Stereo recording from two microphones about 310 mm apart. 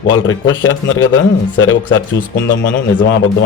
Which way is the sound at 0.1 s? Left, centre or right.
Left.